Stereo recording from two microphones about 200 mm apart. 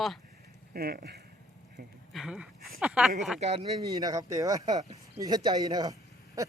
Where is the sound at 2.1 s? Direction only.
5° right (ahead or behind).